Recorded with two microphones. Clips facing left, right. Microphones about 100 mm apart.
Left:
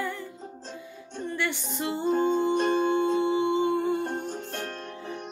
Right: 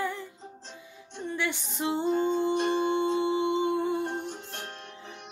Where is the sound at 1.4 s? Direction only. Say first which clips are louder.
Even; 20° right (ahead or behind).